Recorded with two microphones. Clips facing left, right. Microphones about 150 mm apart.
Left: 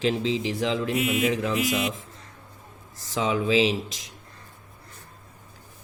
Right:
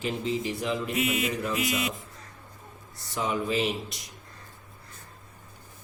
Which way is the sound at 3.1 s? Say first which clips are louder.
Left 5 dB; 90° left.